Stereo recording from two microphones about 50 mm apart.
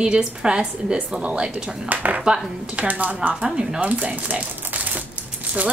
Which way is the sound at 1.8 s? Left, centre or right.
Right.